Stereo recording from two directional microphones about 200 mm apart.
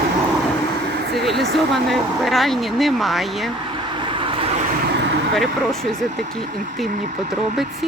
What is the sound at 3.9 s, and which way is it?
Vehicle, 25° right (ahead or behind).